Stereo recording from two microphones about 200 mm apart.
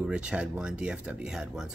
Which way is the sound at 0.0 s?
5° right (ahead or behind).